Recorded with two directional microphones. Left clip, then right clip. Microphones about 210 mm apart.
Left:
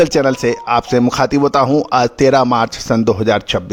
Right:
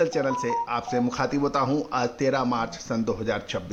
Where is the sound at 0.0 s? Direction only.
50° left (ahead or behind).